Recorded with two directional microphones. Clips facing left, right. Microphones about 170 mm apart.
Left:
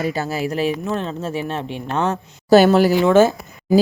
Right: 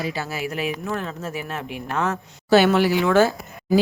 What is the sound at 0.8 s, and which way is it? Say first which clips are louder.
Speech: left 4 dB; 25° left (ahead or behind).